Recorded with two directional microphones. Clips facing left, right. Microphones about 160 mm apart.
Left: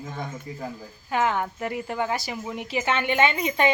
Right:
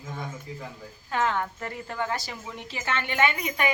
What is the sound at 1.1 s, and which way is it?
A woman's voice, 10° left (ahead or behind).